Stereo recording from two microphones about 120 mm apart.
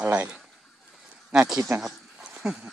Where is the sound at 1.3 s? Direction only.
5° right (ahead or behind).